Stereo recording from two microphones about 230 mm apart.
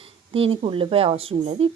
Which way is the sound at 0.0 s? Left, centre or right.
Right.